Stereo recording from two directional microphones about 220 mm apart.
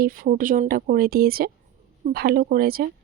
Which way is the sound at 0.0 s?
40° right (ahead or behind).